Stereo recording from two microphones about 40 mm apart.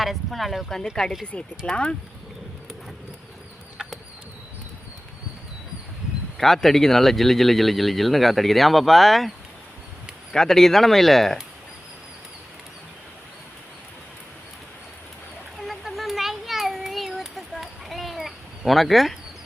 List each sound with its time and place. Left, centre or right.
0.0 s speech: centre
1.7 s speech: left
6.3 s speech: centre
10.3 s speech: centre
15.6 s a sound: centre